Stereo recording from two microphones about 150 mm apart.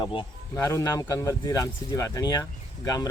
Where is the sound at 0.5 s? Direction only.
20° left (ahead or behind).